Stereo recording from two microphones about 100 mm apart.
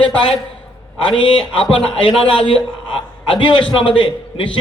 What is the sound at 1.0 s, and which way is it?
A man's voice, 55° left (ahead or behind).